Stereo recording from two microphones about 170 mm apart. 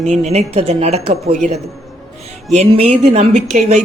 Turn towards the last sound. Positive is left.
turn(degrees=-45)  # may be behind; listen again after turning